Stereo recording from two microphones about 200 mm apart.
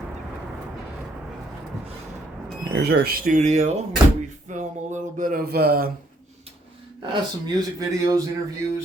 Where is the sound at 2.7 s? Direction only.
50° right (ahead or behind).